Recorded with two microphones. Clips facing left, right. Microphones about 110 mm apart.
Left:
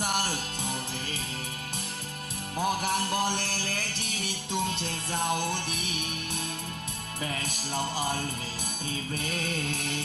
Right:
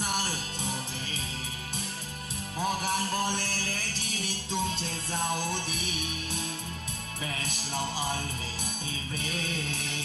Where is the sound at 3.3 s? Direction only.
60° left (ahead or behind).